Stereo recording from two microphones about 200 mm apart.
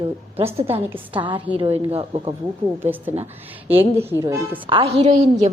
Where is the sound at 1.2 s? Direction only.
25° right (ahead or behind).